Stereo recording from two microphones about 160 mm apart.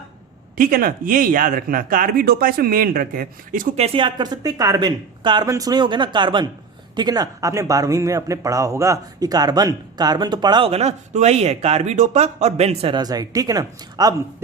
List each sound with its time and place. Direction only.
0.5 s speech: 65° right (ahead or behind)
3.8 s speech: 35° right (ahead or behind)
13.0 s speech: 25° right (ahead or behind)